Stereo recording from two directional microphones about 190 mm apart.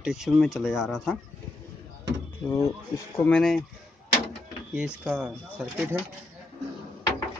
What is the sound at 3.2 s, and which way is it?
Speech, 5° left (ahead or behind).